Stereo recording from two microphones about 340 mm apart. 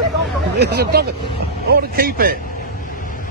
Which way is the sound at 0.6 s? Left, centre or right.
Right.